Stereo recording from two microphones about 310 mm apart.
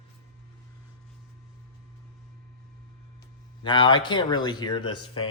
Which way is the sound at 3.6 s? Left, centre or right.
Centre.